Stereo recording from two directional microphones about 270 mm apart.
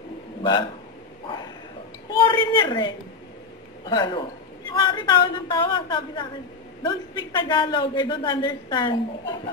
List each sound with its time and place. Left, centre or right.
0.4 s a man's voice: centre
2.0 s a man's voice: centre